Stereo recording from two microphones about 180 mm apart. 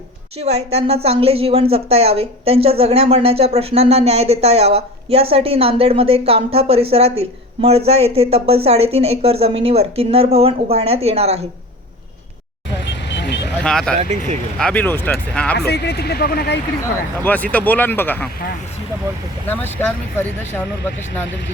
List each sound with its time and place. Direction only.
0.4 s a woman's voice: 35° right (ahead or behind)
12.9 s vehicle: 75° left (ahead or behind)
13.6 s speech: 5° left (ahead or behind)
13.9 s a woman's voice: 40° right (ahead or behind)
14.6 s speech: 10° left (ahead or behind)
15.5 s speech: 65° left (ahead or behind)
16.8 s speech: 10° left (ahead or behind)
19.5 s speech: 10° left (ahead or behind)